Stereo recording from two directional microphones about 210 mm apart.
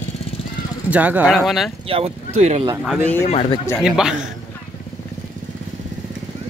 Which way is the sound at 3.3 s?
30° left (ahead or behind).